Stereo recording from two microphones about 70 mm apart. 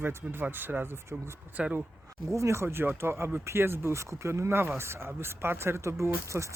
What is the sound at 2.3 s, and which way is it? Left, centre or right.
Speech, right.